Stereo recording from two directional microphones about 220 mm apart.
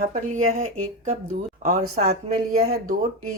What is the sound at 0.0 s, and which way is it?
A woman's voice, 35° right (ahead or behind).